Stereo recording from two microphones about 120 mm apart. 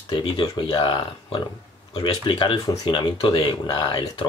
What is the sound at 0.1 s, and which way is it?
Speech, 40° left (ahead or behind).